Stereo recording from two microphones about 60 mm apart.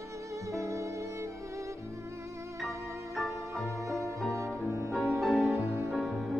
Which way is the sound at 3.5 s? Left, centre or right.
Right.